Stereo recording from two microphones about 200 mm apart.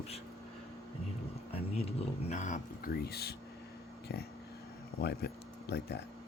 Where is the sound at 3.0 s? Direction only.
50° left (ahead or behind).